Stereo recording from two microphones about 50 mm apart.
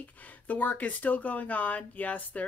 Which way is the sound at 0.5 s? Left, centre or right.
Left.